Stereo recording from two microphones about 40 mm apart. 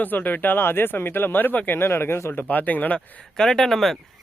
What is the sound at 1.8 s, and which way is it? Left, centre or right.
Speech, left.